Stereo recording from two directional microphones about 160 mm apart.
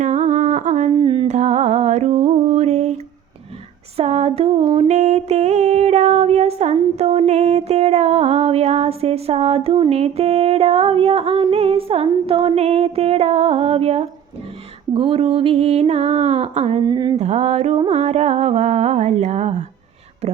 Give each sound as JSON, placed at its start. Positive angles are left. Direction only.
{"t": 0.0, "sound": "humming", "side_deg": -45}
{"t": 0.9, "sound": "music", "side_deg": -30}
{"t": 1.3, "sound": "music", "side_deg": -45}
{"t": 3.9, "sound": "a sound", "side_deg": -40}
{"t": 9.9, "sound": "music", "side_deg": -40}
{"t": 14.9, "sound": "mantra", "side_deg": -35}
{"t": 16.8, "sound": "mantra", "side_deg": -25}
{"t": 17.2, "sound": "music", "side_deg": -45}
{"t": 20.2, "sound": "a sound", "side_deg": -40}